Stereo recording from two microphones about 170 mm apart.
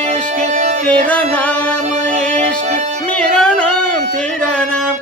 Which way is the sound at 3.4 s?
5° left (ahead or behind).